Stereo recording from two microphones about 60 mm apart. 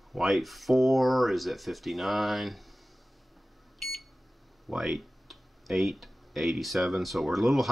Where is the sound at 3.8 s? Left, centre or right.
Centre.